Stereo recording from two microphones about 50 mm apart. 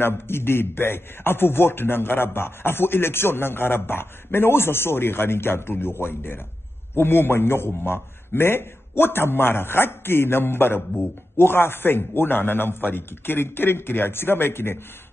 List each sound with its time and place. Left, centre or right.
0.0 s a man's voice: left